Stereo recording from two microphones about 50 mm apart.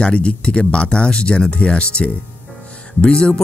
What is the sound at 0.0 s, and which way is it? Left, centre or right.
Speech, left.